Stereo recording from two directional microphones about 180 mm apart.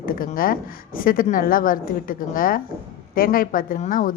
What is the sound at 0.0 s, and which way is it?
A woman's voice, 50° left (ahead or behind).